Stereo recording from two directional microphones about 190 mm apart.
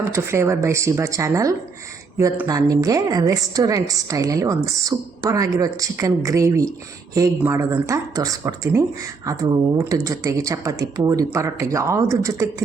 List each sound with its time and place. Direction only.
0.0 s a woman's voice: 15° right (ahead or behind)